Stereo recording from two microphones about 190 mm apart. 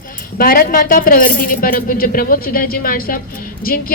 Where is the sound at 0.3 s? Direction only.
50° left (ahead or behind).